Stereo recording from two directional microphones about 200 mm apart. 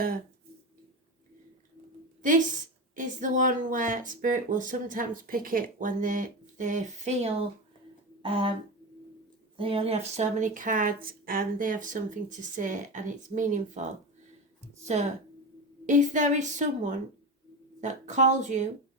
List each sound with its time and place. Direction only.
2.2 s speech: 40° right (ahead or behind)
9.6 s speech: 25° right (ahead or behind)
14.8 s speech: 35° right (ahead or behind)